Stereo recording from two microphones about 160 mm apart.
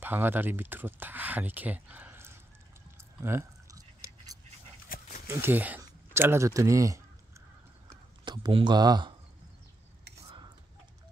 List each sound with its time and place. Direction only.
0.0 s speech: 15° right (ahead or behind)
3.2 s pour: 15° right (ahead or behind)
4.9 s dog: 60° left (ahead or behind)
5.2 s a sound: 15° right (ahead or behind)
8.3 s speech: 30° right (ahead or behind)